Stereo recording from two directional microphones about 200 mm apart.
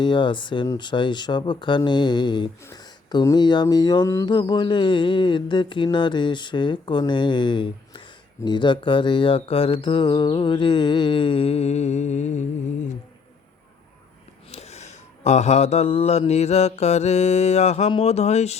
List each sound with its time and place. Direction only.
0.0 s speech: 25° left (ahead or behind)
14.5 s mantra: 35° left (ahead or behind)